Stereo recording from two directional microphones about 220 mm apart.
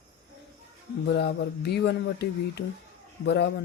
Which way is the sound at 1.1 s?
50° left (ahead or behind).